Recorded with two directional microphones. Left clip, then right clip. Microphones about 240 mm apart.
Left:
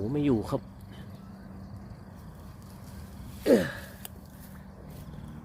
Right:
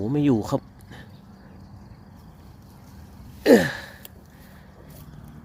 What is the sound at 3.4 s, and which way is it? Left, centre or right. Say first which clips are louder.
Gasp: right 7 dB; right.